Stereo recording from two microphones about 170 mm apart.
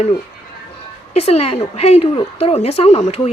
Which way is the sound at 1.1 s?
35° left (ahead or behind).